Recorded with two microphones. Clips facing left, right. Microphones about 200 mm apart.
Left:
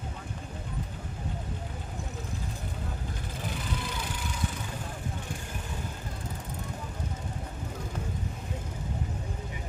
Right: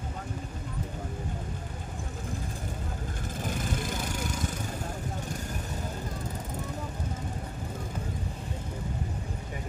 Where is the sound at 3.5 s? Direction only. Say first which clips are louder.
Right 4 dB; 45° right (ahead or behind).